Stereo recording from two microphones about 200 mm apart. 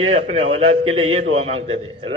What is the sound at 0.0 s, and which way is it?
A man's voice, 30° right (ahead or behind).